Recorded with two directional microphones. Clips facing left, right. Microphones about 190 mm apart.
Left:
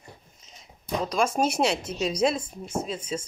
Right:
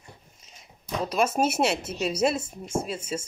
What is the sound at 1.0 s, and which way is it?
Speech, 5° right (ahead or behind).